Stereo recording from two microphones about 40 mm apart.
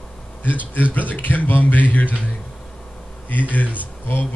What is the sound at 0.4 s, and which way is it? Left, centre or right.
Speech, left.